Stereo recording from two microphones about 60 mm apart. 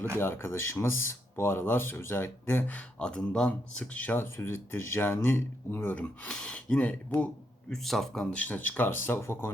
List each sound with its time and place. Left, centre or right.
0.2 s speech: left
3.0 s speech: centre
3.9 s speech: left
4.2 s speech: left
6.0 s speech: centre
7.1 s speech: left
7.7 s speech: centre
8.4 s speech: left